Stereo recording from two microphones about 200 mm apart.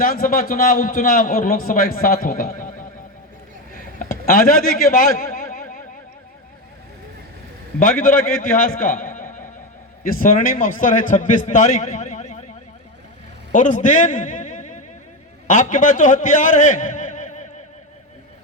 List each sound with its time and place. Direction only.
0.0 s a man's voice: 45° left (ahead or behind)
3.9 s a sound: 45° left (ahead or behind)
7.8 s a man's voice: 45° left (ahead or behind)
13.5 s a man's voice: 40° left (ahead or behind)